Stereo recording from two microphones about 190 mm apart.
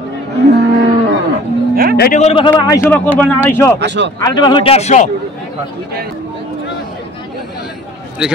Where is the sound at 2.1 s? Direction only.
30° left (ahead or behind).